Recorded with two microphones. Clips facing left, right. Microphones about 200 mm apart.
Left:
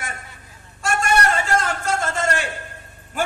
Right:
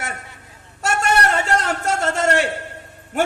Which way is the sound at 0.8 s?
65° right (ahead or behind).